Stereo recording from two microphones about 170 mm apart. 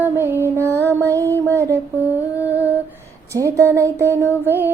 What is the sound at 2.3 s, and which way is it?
Humming, 10° right (ahead or behind).